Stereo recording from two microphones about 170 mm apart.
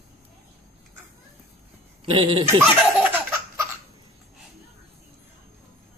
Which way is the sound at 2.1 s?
30° right (ahead or behind).